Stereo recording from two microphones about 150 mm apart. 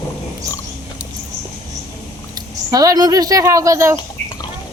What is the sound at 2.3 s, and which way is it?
Speech, 25° right (ahead or behind).